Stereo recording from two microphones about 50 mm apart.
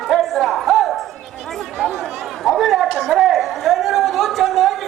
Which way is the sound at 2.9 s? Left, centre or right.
Centre.